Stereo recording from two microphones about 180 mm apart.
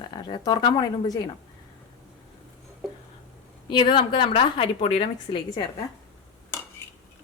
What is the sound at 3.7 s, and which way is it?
Speech, 25° left (ahead or behind).